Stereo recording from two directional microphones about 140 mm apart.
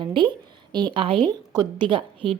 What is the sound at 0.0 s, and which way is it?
A woman's voice, 35° right (ahead or behind).